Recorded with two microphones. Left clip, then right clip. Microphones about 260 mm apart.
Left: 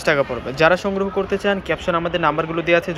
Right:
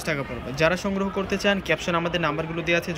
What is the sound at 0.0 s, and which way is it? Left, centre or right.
Speech, centre.